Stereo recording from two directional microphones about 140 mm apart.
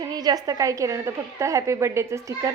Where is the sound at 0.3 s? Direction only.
25° right (ahead or behind).